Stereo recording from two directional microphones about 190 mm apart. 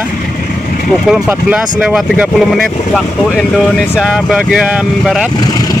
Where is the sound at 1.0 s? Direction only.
5° right (ahead or behind).